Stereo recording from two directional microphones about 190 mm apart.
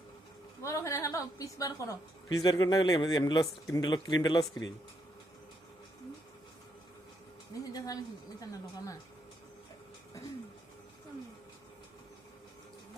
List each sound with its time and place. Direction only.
0.6 s a woman's voice: 15° left (ahead or behind)
7.6 s a woman's voice: 20° left (ahead or behind)